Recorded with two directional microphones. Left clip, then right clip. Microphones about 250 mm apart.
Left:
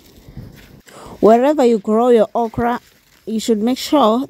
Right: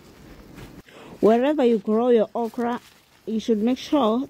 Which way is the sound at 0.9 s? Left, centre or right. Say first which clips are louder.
Left 8 dB; left.